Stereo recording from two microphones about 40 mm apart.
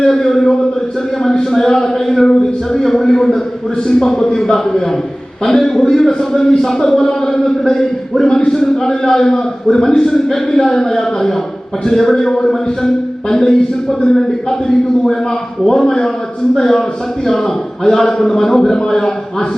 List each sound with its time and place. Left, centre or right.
0.0 s a man's voice: centre
15.6 s a man's voice: centre